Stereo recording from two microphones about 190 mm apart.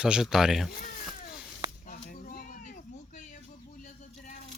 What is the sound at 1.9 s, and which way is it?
Children playing, 45° left (ahead or behind).